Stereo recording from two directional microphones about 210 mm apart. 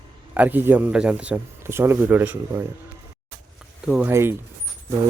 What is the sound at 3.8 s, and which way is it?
Speech, 5° right (ahead or behind).